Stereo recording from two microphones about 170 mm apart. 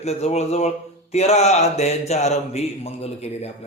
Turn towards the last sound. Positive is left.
turn(degrees=40)  # may be behind; listen again after turning